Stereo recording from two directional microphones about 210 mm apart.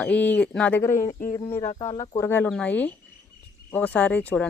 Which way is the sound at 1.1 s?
40° left (ahead or behind).